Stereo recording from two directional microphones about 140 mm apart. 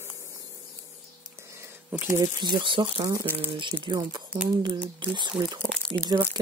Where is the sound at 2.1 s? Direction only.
35° right (ahead or behind).